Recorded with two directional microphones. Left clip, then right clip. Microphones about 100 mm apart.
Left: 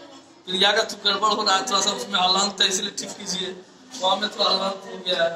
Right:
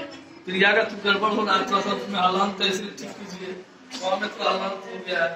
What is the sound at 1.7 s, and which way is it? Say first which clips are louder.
Speech: left 2 dB; 45° right (ahead or behind).